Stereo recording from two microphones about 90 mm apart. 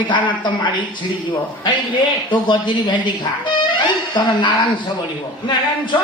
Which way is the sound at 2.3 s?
60° left (ahead or behind).